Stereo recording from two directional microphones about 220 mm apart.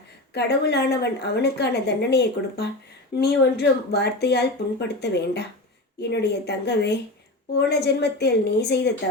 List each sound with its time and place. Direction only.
0.3 s a woman's voice: 50° left (ahead or behind)